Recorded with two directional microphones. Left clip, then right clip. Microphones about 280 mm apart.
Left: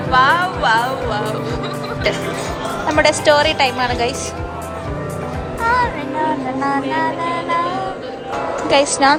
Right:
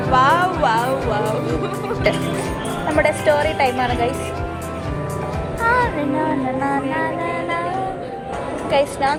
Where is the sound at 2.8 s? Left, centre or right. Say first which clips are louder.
Left 3 dB; centre.